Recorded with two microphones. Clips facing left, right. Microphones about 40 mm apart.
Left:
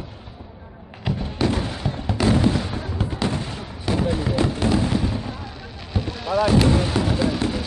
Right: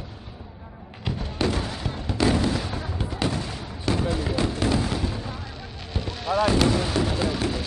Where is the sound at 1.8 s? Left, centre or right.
Centre.